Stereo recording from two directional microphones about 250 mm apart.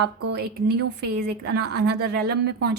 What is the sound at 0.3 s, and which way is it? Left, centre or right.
A woman's voice, right.